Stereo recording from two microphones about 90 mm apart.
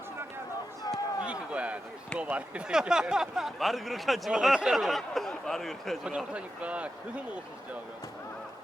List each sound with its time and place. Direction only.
1.2 s a sound: 15° right (ahead or behind)
2.1 s speech: 15° right (ahead or behind); by 6.0 s centre (ahead or behind)
6.1 s speech: 15° right (ahead or behind)